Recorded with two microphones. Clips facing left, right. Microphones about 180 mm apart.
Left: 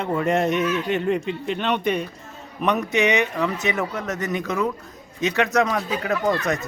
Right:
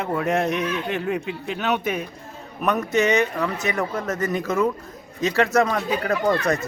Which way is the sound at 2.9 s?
20° left (ahead or behind).